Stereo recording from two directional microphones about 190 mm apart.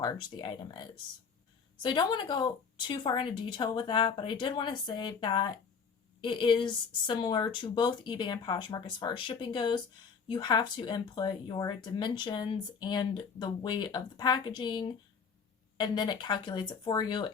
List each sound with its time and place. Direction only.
0.0 s speech: 20° left (ahead or behind)